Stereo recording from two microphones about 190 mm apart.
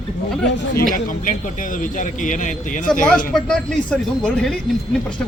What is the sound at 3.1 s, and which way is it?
A man's voice, 5° left (ahead or behind).